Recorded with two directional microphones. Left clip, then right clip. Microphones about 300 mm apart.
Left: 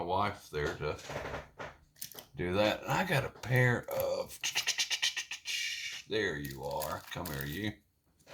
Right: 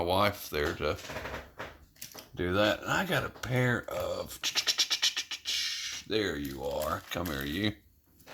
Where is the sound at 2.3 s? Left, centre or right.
Centre.